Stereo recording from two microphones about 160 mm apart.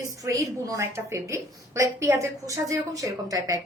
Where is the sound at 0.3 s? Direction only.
20° right (ahead or behind).